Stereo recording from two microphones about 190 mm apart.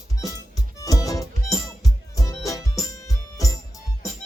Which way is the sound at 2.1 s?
15° left (ahead or behind).